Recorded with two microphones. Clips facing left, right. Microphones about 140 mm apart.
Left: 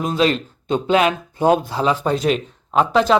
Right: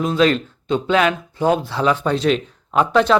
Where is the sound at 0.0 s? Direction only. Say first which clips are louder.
Right 2 dB; 40° left (ahead or behind).